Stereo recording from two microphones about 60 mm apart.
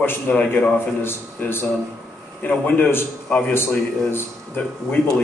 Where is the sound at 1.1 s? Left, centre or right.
Left.